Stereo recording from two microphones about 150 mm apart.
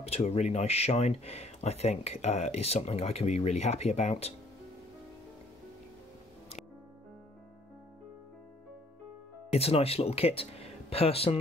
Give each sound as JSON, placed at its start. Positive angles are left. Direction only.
{"t": 0.0, "sound": "speech", "side_deg": 45}
{"t": 9.5, "sound": "speech", "side_deg": 40}